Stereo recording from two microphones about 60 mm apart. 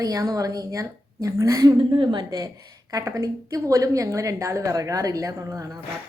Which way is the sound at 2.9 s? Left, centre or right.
Right.